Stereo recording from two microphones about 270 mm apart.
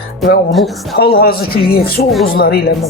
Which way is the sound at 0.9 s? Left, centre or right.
Left.